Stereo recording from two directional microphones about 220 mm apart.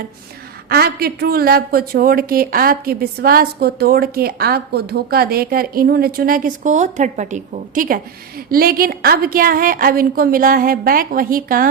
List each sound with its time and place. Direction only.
0.7 s a woman's voice: 45° right (ahead or behind)